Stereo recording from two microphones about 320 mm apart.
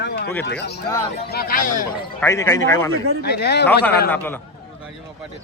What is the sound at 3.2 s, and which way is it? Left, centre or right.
Speech, left.